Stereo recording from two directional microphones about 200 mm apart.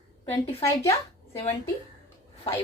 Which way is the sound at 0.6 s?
15° left (ahead or behind).